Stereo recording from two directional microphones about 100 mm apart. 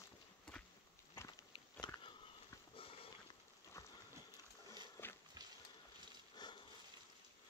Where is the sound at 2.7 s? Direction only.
65° left (ahead or behind).